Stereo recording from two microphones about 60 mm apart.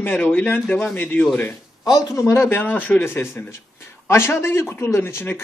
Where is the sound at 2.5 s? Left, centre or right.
Left.